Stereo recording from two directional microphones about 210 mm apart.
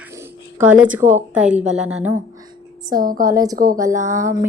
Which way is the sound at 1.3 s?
5° right (ahead or behind).